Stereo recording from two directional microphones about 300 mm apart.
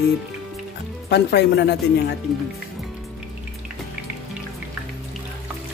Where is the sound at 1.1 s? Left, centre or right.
Left.